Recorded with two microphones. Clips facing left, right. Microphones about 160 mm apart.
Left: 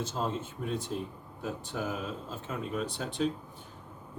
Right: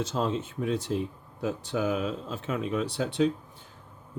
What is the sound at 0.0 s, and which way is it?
Speech, 85° right.